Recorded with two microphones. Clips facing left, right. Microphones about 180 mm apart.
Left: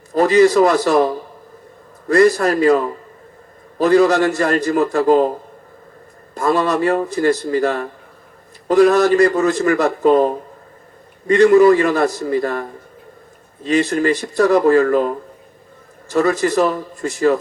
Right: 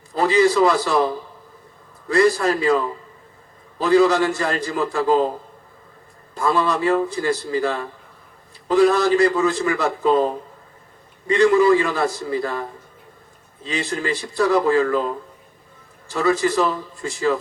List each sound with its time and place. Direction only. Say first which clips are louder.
0.1 s a man's voice: left 5 dB; 45° left (ahead or behind)
6.3 s a man's voice: left 3 dB; 45° left (ahead or behind)
13.7 s a man's voice: left 8 dB; 45° left (ahead or behind)